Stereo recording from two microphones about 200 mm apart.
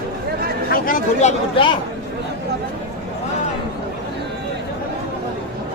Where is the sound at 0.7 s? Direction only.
45° left (ahead or behind).